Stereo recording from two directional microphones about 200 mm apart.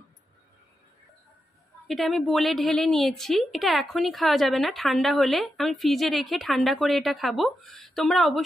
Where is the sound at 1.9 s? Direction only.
Centre (ahead or behind).